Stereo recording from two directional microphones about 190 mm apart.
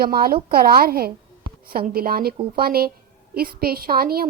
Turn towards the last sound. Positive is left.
turn(degrees=-50)  # may be behind; listen again after turning